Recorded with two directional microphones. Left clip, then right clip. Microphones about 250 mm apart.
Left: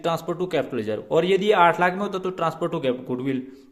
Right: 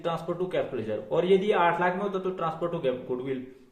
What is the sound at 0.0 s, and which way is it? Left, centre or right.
A man's voice, left.